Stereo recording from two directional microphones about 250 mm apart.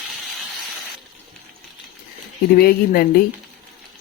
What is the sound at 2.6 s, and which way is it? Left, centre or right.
Speech, left.